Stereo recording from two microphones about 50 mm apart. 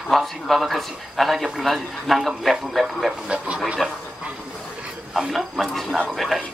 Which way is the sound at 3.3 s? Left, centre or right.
Right.